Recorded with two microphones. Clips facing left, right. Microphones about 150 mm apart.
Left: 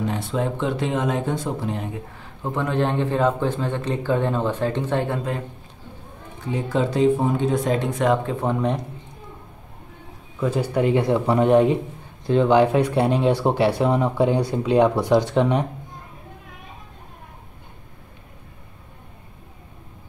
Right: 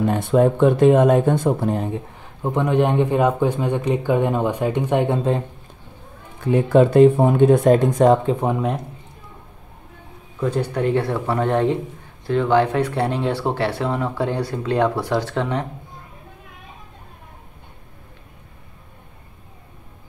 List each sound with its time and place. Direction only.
0.0 s speech: 55° right (ahead or behind)
2.1 s a man's voice: 20° right (ahead or behind)
6.4 s speech: 55° right (ahead or behind); by 8.2 s 40° right (ahead or behind)
8.3 s a man's voice: 15° right (ahead or behind)
10.4 s speech: 10° left (ahead or behind)